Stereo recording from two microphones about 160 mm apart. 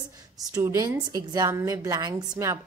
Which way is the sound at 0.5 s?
20° right (ahead or behind).